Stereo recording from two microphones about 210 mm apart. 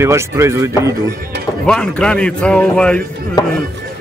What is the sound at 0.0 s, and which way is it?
Speech, 15° right (ahead or behind).